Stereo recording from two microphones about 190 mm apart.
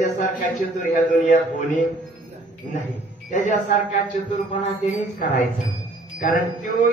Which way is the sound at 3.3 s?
40° left (ahead or behind).